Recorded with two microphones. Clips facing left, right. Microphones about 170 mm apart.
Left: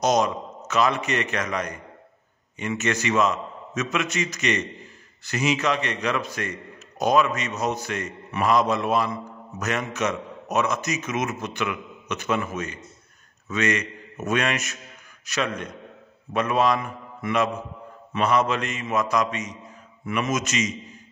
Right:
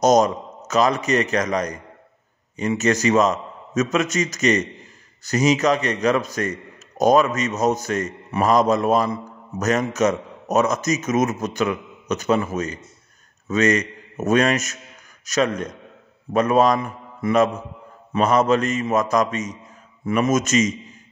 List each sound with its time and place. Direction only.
0.0 s a man's voice: 45° right (ahead or behind)